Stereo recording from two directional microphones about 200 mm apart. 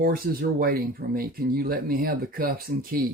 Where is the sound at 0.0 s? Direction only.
50° right (ahead or behind).